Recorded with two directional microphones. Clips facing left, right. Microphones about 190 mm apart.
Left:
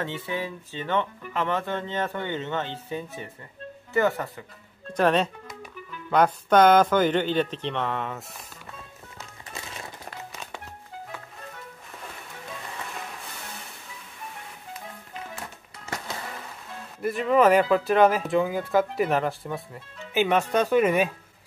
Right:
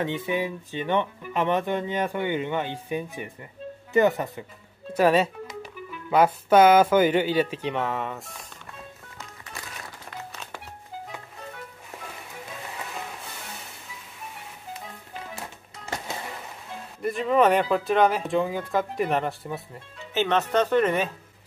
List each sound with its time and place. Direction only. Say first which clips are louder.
0.0 s speech: right 4 dB; 15° right (ahead or behind)
4.9 s speech: right 2 dB; 5° right (ahead or behind)
17.0 s speech: left 1 dB; centre (ahead or behind)
20.2 s speech: even; 10° left (ahead or behind)